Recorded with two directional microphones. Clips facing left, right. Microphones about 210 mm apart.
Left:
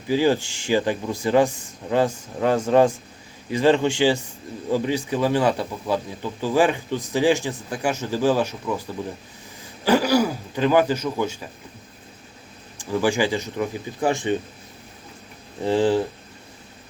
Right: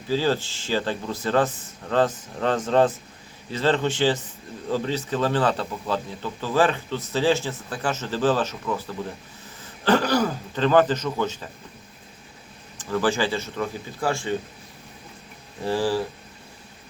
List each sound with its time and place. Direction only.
0.1 s a man's voice: 15° left (ahead or behind)
12.7 s speech: 10° left (ahead or behind)
15.6 s speech: 20° left (ahead or behind)